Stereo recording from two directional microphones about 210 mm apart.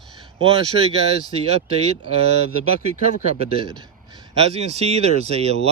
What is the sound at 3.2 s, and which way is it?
Speech, 30° right (ahead or behind).